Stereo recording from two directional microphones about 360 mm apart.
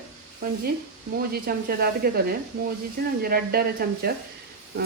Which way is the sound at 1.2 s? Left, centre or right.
Right.